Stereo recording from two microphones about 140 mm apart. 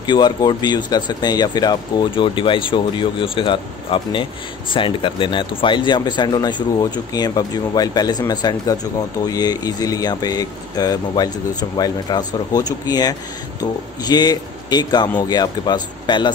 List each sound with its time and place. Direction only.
0.0 s speech: 30° left (ahead or behind)